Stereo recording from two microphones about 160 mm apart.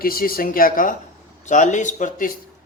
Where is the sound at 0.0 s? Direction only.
65° left (ahead or behind).